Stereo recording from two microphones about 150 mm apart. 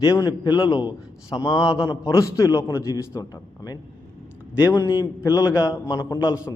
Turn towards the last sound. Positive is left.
turn(degrees=25)  # may be behind; listen again after turning